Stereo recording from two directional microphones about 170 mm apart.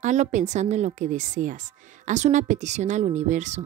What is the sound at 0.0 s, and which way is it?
A woman's voice, 45° right (ahead or behind).